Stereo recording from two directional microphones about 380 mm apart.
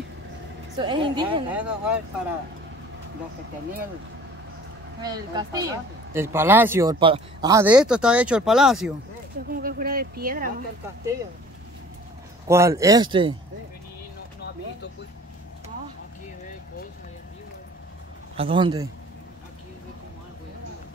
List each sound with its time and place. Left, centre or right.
0.7 s speech: centre
5.0 s speech: centre
9.5 s speech: right
12.4 s speech: centre
18.3 s speech: centre